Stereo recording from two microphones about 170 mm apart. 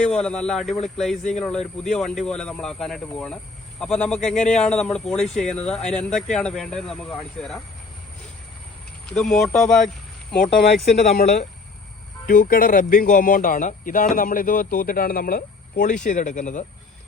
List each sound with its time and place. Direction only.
0.0 s speech: 5° left (ahead or behind)
9.0 s speech: 5° left (ahead or behind)
11.0 s speech: 45° left (ahead or behind)